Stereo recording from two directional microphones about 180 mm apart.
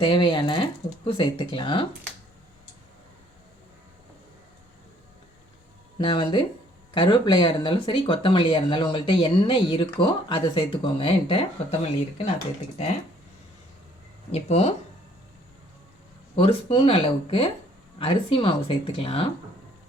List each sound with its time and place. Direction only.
0.0 s speech: 25° left (ahead or behind)
6.0 s speech: 25° left (ahead or behind)
14.3 s speech: 35° left (ahead or behind)
16.3 s speech: 30° left (ahead or behind)